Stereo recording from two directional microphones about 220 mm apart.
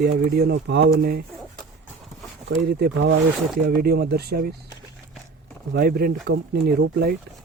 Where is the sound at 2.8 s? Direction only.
50° right (ahead or behind).